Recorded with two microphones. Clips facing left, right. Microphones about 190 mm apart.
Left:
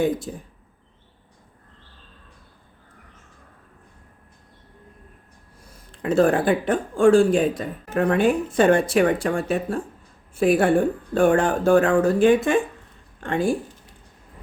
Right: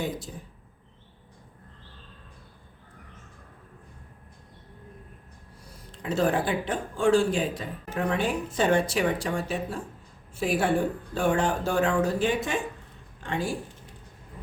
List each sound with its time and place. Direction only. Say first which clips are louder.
0.3 s speech: left 7 dB; 60° left (ahead or behind)
5.9 s speech: left 7 dB; 50° left (ahead or behind)